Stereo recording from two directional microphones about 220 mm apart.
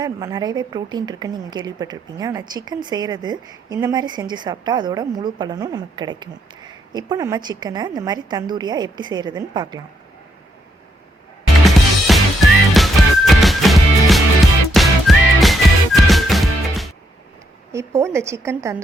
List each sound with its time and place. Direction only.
0.0 s a woman's voice: 15° right (ahead or behind)
11.6 s music: centre (ahead or behind)
17.7 s speech: 15° right (ahead or behind)